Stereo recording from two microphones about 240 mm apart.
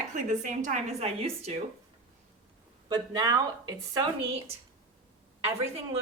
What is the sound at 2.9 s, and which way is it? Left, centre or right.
A woman's voice, centre.